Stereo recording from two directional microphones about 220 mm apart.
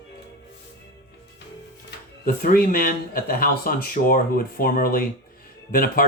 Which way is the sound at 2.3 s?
40° left (ahead or behind).